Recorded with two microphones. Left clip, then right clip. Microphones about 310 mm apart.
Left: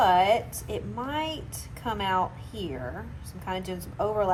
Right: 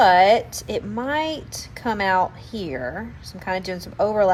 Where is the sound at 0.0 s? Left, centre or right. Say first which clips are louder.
Right 7 dB; right.